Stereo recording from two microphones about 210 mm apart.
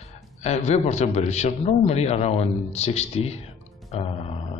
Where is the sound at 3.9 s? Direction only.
25° left (ahead or behind).